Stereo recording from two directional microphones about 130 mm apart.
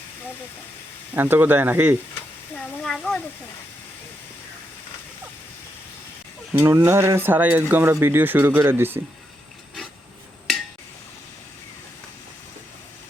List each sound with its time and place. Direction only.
1.1 s speech: 15° right (ahead or behind)
2.6 s a sound: 5° left (ahead or behind)
6.5 s speech: 20° right (ahead or behind)